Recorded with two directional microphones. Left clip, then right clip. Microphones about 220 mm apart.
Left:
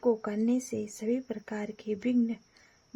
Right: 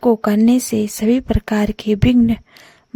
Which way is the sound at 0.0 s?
50° right (ahead or behind).